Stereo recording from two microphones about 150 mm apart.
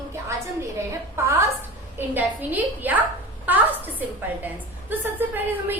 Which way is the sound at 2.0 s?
10° right (ahead or behind).